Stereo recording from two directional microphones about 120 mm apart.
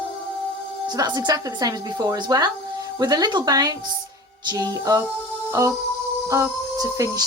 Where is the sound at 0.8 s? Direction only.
35° right (ahead or behind).